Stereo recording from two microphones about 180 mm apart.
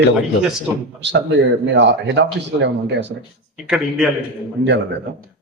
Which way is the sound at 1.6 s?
75° right (ahead or behind).